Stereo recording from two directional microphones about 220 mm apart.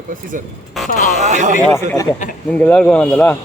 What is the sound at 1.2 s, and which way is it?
Speech, 35° right (ahead or behind).